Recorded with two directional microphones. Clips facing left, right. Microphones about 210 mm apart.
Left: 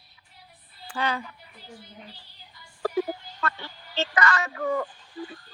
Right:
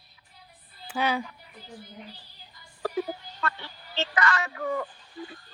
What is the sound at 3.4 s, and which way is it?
Speech, 40° left (ahead or behind).